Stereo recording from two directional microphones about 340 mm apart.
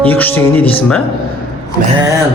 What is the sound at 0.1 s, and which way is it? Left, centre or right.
Speech, centre.